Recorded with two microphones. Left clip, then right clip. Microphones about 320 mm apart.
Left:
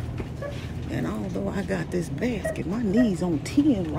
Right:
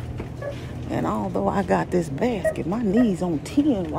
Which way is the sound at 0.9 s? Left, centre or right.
Centre.